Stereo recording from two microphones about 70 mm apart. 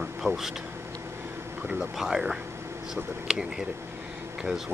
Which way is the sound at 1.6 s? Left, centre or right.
Centre.